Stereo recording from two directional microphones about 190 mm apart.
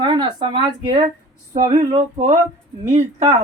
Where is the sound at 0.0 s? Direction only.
25° right (ahead or behind).